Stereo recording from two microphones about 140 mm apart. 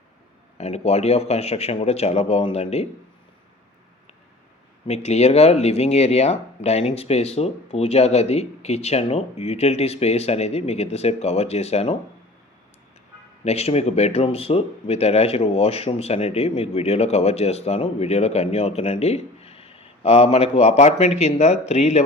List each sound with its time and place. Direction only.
0.6 s speech: 50° left (ahead or behind)
4.9 s speech: 50° left (ahead or behind)
13.4 s speech: 50° left (ahead or behind)